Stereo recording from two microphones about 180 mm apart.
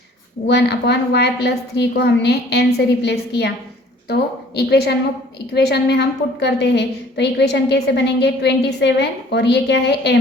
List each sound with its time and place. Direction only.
0.4 s a woman's voice: 70° left (ahead or behind)